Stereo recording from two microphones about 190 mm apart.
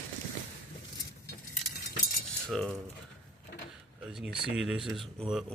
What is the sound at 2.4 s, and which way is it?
Cutlery, centre (ahead or behind).